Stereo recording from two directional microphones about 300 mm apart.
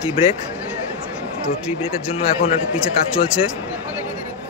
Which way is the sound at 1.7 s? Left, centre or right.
Centre.